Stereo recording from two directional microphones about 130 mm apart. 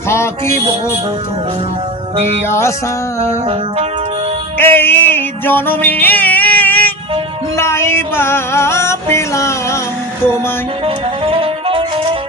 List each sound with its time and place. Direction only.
0.1 s music: 20° left (ahead or behind)
2.1 s music: 55° right (ahead or behind)
2.5 s music: 20° left (ahead or behind)
3.2 s music: 55° right (ahead or behind)
4.5 s music: 15° left (ahead or behind)
10.8 s music: 45° right (ahead or behind)